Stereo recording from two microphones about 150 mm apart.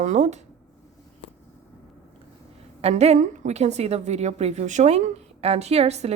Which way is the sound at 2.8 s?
45° right (ahead or behind).